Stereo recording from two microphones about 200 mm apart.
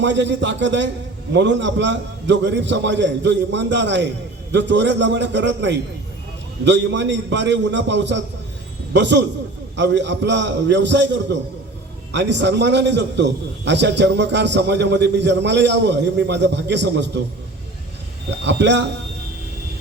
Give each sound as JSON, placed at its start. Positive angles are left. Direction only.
{"t": 0.0, "sound": "a man's voice", "side_deg": -65}
{"t": 18.4, "sound": "a man's voice", "side_deg": -60}